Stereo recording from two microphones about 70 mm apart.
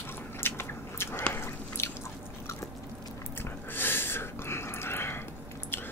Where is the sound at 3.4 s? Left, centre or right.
Left.